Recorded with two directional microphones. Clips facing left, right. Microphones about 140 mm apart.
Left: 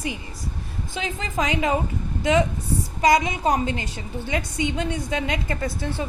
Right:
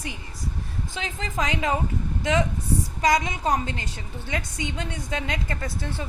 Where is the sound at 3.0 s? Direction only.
10° left (ahead or behind).